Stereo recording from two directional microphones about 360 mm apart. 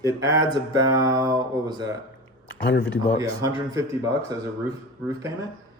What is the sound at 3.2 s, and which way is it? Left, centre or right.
Speech, centre.